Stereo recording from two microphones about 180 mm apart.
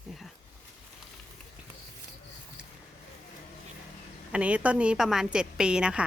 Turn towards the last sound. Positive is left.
turn(degrees=-5)  # may be behind; listen again after turning